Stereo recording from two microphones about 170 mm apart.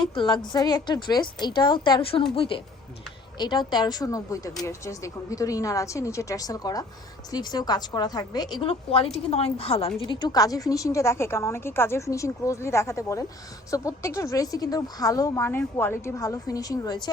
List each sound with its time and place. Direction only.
0.1 s a woman's voice: 25° left (ahead or behind)